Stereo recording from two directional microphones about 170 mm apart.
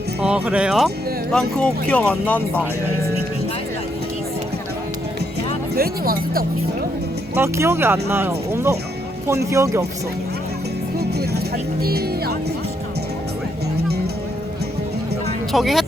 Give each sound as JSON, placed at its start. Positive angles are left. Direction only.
{"t": 0.2, "sound": "speech", "side_deg": -10}
{"t": 5.7, "sound": "speech", "side_deg": -60}
{"t": 7.3, "sound": "speech", "side_deg": -15}
{"t": 11.8, "sound": "speech", "side_deg": -65}
{"t": 15.5, "sound": "speech", "side_deg": 0}